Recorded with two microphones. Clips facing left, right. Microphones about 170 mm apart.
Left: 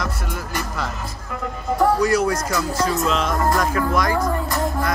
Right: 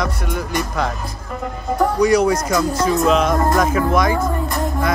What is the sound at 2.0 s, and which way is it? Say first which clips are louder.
Speech: right 4 dB; 15° right (ahead or behind).